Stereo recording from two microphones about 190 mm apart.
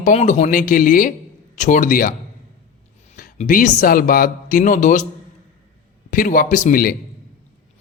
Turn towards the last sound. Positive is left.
turn(degrees=50)  # may be behind; listen again after turning